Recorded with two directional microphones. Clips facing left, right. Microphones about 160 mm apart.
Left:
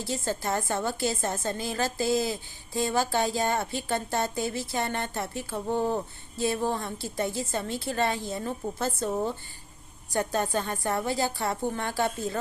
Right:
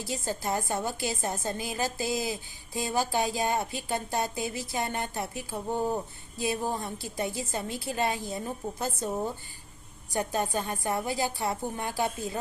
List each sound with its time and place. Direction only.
0.0 s a woman's voice: 15° right (ahead or behind)